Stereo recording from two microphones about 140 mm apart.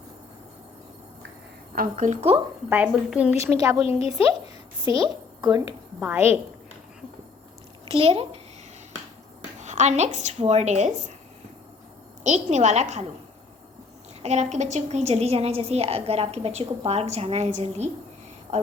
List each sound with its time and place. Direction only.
1.7 s a woman's voice: 75° right (ahead or behind)
2.6 s a woman's voice: 15° right (ahead or behind)
3.3 s a woman's voice: 20° right (ahead or behind)
3.8 s a woman's voice: 45° left (ahead or behind)
4.9 s a woman's voice: 30° right (ahead or behind)
6.0 s a woman's voice: 15° right (ahead or behind)
7.9 s a woman's voice: 45° right (ahead or behind)
9.6 s speech: 55° right (ahead or behind)
12.2 s speech: 55° right (ahead or behind)
14.2 s a woman's voice: 55° right (ahead or behind)